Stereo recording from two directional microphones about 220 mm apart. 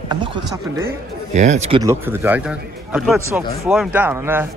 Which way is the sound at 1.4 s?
30° right (ahead or behind).